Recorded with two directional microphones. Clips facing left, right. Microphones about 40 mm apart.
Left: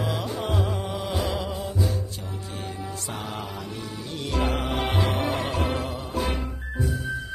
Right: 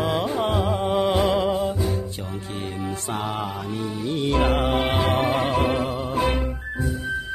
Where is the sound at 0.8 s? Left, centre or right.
Right.